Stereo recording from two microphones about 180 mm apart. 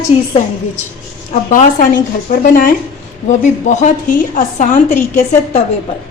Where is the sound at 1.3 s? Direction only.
45° left (ahead or behind).